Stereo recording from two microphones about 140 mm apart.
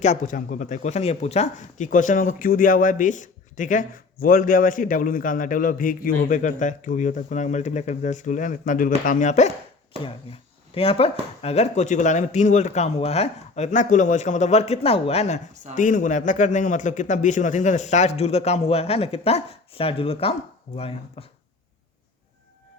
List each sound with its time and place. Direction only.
0.0 s speech: 60° left (ahead or behind)
9.0 s speech: 65° left (ahead or behind)
10.3 s speech: 45° left (ahead or behind)
15.7 s speech: 65° left (ahead or behind); by 21.2 s 45° left (ahead or behind)